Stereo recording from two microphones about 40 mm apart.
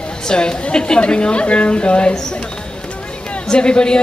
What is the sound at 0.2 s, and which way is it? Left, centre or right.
A woman's voice, left.